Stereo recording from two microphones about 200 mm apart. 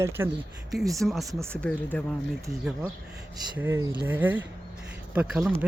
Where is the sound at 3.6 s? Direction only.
10° right (ahead or behind).